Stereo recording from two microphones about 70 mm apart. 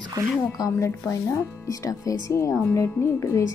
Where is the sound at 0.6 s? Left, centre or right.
Left.